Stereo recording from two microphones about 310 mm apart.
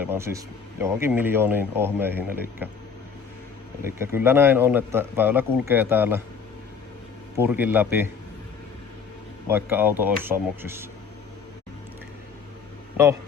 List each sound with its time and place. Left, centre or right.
0.0 s speech: centre
3.8 s speech: centre
7.3 s speech: centre
9.5 s speech: centre